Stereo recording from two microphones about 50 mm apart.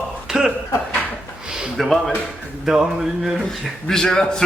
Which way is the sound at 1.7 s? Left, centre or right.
Centre.